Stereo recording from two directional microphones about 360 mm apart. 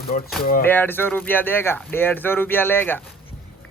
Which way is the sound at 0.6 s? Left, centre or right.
Centre.